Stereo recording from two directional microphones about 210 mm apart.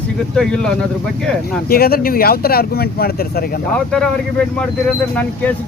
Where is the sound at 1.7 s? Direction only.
45° left (ahead or behind).